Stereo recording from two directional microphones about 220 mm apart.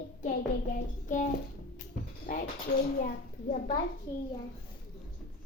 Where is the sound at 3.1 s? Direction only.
40° left (ahead or behind).